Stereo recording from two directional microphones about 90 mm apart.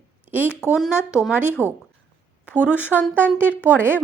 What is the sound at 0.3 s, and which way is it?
Speech, 25° left (ahead or behind).